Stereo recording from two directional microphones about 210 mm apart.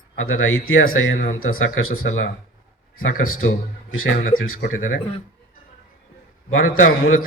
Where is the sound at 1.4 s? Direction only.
80° left.